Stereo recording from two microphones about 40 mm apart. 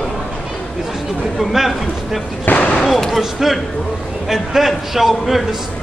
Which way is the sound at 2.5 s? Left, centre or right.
Left.